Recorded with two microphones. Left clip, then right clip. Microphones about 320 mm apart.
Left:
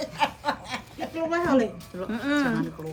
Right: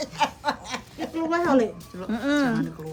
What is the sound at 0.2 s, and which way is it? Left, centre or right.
Snicker, centre.